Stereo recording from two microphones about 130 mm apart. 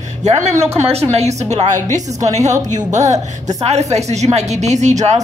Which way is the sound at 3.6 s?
55° right (ahead or behind).